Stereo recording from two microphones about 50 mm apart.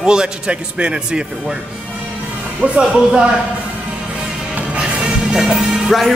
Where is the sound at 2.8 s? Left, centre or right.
Centre.